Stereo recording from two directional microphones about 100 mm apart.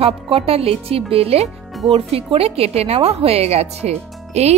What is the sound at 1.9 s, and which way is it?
A woman's voice, 75° right (ahead or behind).